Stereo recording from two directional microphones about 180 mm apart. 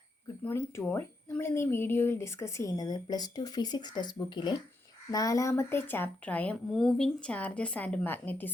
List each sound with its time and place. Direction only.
0.4 s speech: 15° left (ahead or behind)